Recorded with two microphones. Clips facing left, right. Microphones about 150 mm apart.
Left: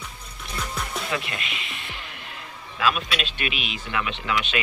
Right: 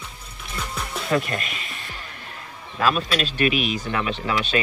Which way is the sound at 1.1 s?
45° right (ahead or behind).